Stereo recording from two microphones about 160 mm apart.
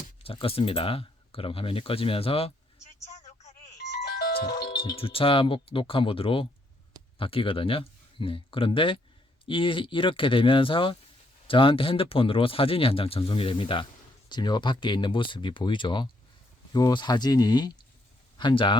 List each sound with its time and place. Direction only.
0.2 s speech: 35° left (ahead or behind)
3.9 s music: 85° left
4.9 s speech: 35° left (ahead or behind)